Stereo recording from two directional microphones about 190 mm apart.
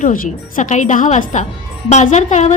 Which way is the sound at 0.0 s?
45° left (ahead or behind).